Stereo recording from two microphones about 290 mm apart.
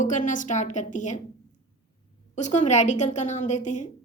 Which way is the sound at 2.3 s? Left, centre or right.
Left.